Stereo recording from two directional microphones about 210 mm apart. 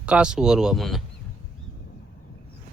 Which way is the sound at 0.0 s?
5° right (ahead or behind).